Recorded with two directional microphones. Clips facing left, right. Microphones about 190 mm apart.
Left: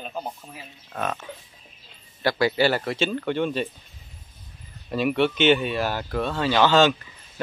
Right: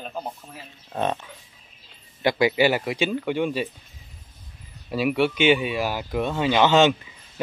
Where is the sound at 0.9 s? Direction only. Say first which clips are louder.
Right 4 dB; 20° right (ahead or behind).